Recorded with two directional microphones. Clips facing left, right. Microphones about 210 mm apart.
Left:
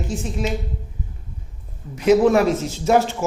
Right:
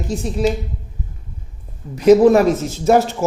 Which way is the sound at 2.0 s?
40° right (ahead or behind).